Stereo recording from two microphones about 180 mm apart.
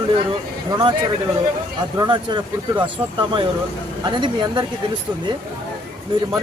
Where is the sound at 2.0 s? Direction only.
25° right (ahead or behind).